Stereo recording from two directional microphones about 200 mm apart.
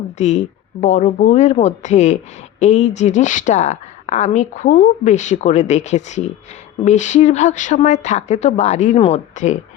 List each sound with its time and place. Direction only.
0.2 s speech: 35° left (ahead or behind)